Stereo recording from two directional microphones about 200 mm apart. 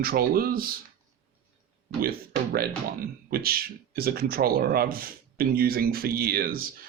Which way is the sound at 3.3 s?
50° right (ahead or behind).